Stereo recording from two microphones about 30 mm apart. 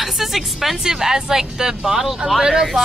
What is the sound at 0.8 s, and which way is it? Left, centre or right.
Speech, centre.